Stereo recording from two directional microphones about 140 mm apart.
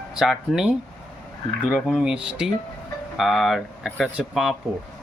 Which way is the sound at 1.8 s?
5° right (ahead or behind).